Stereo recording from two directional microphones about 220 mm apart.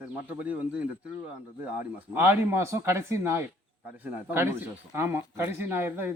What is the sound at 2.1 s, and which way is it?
A man's voice, 10° right (ahead or behind).